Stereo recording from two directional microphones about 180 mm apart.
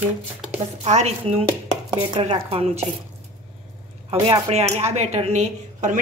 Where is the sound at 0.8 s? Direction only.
35° right (ahead or behind).